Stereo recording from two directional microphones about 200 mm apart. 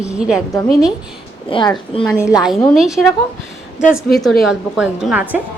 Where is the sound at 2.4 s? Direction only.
Centre (ahead or behind).